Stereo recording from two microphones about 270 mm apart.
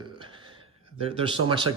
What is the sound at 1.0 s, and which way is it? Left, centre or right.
Speech, right.